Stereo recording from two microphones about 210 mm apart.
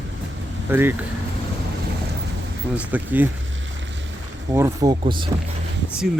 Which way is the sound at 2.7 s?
5° right (ahead or behind).